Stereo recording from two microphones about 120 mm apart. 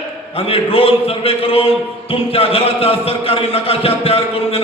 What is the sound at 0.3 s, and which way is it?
Speech, 55° left (ahead or behind).